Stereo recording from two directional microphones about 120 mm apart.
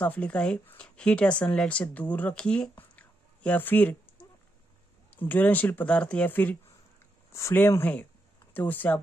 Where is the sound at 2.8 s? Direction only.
10° left (ahead or behind).